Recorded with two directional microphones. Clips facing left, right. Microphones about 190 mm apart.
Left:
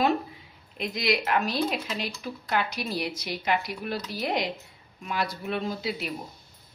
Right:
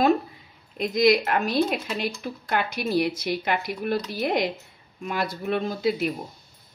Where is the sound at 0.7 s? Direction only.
45° right (ahead or behind).